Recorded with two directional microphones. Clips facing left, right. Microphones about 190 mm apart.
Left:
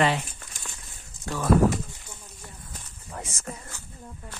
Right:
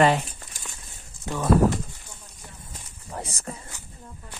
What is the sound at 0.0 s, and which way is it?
Speech, 45° right (ahead or behind).